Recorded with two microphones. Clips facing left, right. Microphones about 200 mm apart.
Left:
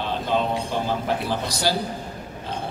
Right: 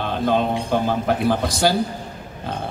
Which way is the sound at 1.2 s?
50° right (ahead or behind).